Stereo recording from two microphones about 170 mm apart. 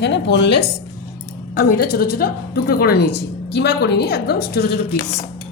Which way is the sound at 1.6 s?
60° left (ahead or behind).